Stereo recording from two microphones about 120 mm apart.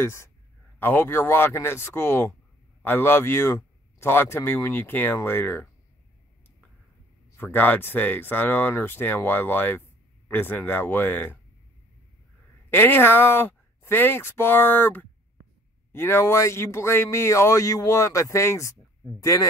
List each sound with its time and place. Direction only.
0.0 s speech: 20° left (ahead or behind)
7.3 s speech: 15° left (ahead or behind)
12.6 s speech: 15° left (ahead or behind)